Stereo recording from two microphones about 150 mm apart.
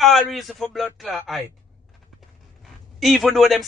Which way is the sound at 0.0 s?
Centre (ahead or behind).